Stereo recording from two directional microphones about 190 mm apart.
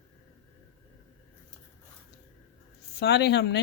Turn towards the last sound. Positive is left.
turn(degrees=60)  # may be behind; listen again after turning